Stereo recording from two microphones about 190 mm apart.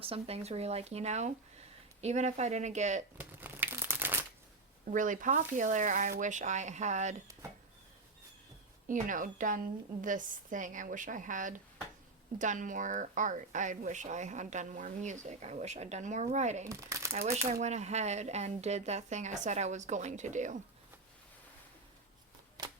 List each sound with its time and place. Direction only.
0.0 s speech: 30° right (ahead or behind)
3.2 s a sound: 10° right (ahead or behind)
4.9 s a woman's voice: 40° right (ahead or behind)
8.9 s a woman's voice: 45° right (ahead or behind)
16.6 s speech: 15° right (ahead or behind)
17.5 s speech: 35° right (ahead or behind)